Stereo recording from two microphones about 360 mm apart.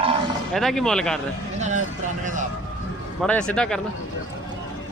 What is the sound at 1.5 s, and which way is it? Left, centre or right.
Speech, centre.